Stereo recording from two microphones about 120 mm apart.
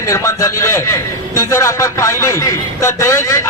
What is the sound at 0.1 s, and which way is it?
A man's voice, 25° left (ahead or behind).